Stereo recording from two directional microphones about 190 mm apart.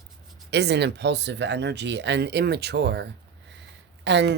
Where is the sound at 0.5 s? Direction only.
60° right (ahead or behind).